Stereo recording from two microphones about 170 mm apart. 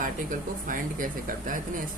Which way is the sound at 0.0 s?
50° right (ahead or behind).